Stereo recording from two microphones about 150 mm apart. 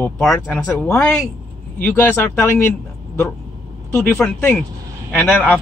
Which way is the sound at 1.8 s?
15° left (ahead or behind).